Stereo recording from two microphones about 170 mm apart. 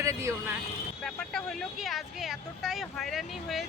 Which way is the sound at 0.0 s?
15° right (ahead or behind).